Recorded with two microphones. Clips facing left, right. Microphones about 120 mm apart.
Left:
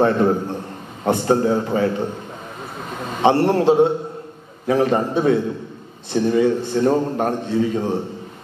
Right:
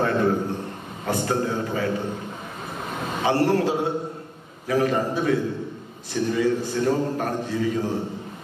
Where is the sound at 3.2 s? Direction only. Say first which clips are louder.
Left 5 dB; 25° left (ahead or behind).